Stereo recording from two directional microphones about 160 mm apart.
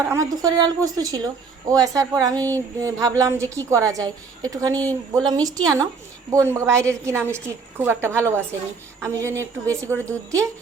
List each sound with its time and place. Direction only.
0.0 s a woman's voice: 15° right (ahead or behind)
2.3 s a sound: 10° left (ahead or behind)
2.8 s a woman's voice: 20° right (ahead or behind)